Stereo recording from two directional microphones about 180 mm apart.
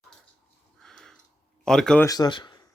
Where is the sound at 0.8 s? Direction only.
5° left (ahead or behind).